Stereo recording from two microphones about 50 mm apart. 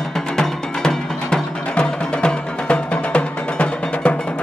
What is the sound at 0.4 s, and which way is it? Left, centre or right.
Music, centre.